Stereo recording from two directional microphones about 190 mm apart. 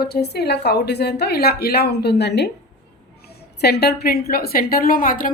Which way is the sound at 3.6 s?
60° left (ahead or behind).